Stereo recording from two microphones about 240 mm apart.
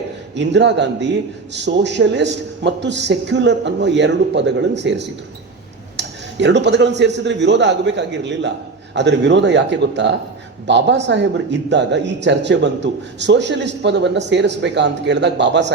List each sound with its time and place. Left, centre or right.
0.3 s speech: right